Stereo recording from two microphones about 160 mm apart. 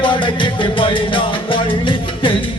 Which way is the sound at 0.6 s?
30° left (ahead or behind).